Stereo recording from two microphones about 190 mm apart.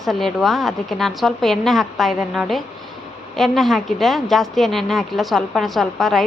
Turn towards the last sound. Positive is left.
turn(degrees=0)  # may be behind; listen again after turning